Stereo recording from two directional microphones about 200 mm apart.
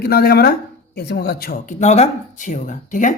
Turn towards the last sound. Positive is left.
turn(degrees=40)  # may be behind; listen again after turning